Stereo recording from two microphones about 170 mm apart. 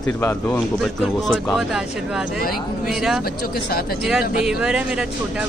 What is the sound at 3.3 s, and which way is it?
Speech, 65° left (ahead or behind).